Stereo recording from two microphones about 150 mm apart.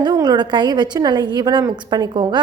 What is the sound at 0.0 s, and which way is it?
A woman's voice, 30° right (ahead or behind).